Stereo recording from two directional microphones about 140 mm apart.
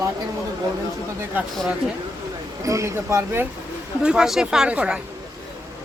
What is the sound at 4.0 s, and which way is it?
A woman's voice, 5° right (ahead or behind).